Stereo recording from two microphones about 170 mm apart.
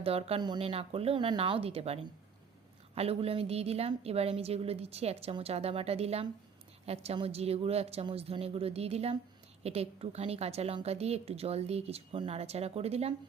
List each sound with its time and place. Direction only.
0.0 s a woman's voice: 35° right (ahead or behind)